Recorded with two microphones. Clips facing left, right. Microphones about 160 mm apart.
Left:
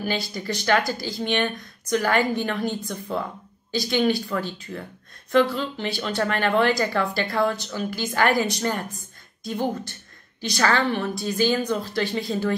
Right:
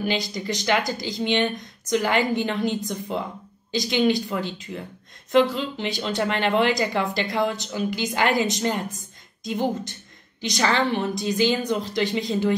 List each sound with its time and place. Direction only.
0.0 s speech: 20° right (ahead or behind)